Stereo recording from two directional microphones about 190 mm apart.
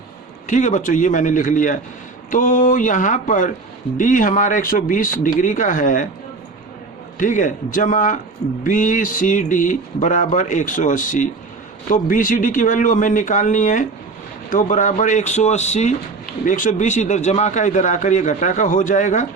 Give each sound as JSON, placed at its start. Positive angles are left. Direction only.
{"t": 0.4, "sound": "speech", "side_deg": 40}
{"t": 7.2, "sound": "a man's voice", "side_deg": 45}